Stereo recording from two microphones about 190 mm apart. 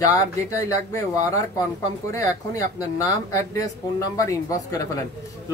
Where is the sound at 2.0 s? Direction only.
15° left (ahead or behind).